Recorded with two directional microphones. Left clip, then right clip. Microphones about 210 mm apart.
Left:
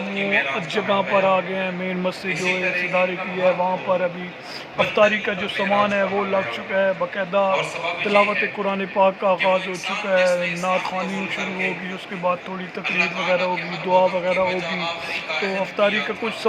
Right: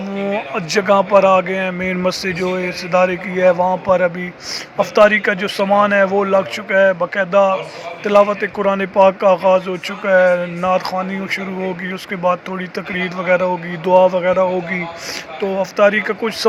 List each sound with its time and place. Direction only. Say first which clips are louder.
0.3 s a man's voice: right 3 dB; 20° right (ahead or behind)
13.3 s a man's voice: right 5 dB; 15° right (ahead or behind)
15.8 s a man's voice: right 7 dB; 20° right (ahead or behind)